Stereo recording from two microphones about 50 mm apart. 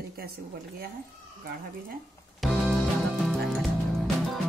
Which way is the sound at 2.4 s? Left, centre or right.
Centre.